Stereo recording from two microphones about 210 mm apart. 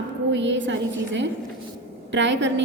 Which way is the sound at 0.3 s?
60° right (ahead or behind).